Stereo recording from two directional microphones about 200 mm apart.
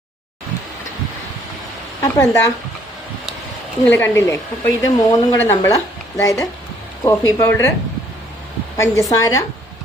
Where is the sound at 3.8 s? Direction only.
10° left (ahead or behind).